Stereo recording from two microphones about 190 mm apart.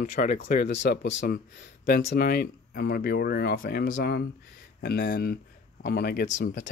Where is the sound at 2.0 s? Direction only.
55° left (ahead or behind).